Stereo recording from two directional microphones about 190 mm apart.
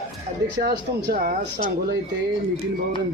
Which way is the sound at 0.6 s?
55° right (ahead or behind).